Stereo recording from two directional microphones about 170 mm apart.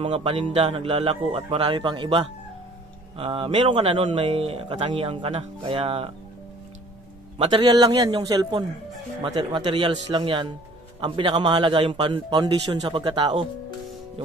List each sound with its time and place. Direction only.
0.0 s speech: 30° right (ahead or behind)
7.3 s speech: 30° right (ahead or behind)